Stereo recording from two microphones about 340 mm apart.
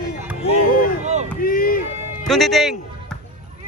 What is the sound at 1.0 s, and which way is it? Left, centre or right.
Boat, centre.